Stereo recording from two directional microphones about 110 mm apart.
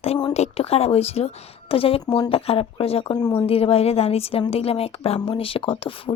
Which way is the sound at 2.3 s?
60° left (ahead or behind).